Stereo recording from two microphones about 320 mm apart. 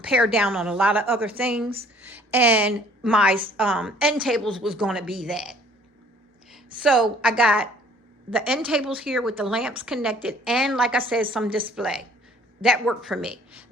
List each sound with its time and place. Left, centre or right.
0.0 s a woman's voice: centre
6.8 s a woman's voice: centre